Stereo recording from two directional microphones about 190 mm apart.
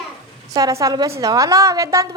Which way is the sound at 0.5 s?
20° right (ahead or behind).